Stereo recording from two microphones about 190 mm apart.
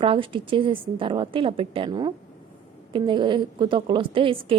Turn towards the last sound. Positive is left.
turn(degrees=-25)  # may be behind; listen again after turning